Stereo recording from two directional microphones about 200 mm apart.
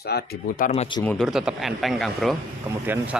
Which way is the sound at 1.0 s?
Centre (ahead or behind).